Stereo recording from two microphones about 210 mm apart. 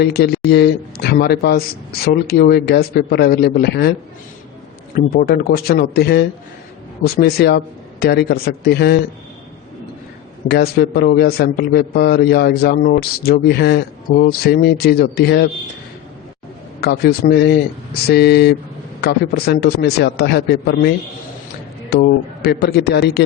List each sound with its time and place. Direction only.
0.0 s a man's voice: 50° left (ahead or behind)
4.9 s a man's voice: 45° left (ahead or behind)
10.5 s a man's voice: 50° left (ahead or behind)
16.8 s a man's voice: 50° left (ahead or behind)
21.9 s a man's voice: 50° left (ahead or behind)